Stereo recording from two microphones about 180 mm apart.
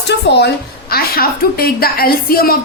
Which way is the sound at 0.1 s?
65° left (ahead or behind).